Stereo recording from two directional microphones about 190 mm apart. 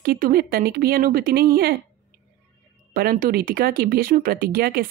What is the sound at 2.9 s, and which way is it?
Speech, 50° right (ahead or behind).